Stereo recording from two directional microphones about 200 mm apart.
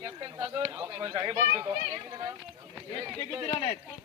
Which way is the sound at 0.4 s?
10° right (ahead or behind).